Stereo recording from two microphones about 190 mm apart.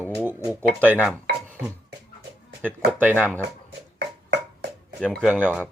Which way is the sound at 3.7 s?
60° right (ahead or behind).